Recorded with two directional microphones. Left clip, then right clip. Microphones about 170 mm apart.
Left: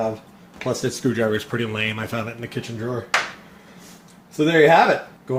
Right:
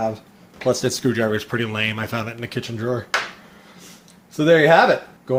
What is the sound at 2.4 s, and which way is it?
Speech, 50° right (ahead or behind).